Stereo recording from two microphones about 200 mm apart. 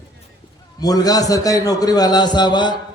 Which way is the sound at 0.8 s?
20° left (ahead or behind).